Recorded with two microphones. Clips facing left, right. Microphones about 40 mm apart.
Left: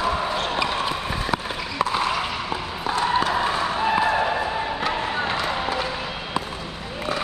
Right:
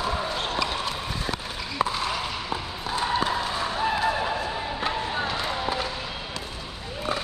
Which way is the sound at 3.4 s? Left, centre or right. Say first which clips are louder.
Left 4 dB; left.